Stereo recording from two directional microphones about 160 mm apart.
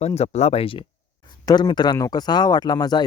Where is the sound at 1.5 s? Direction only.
25° left (ahead or behind).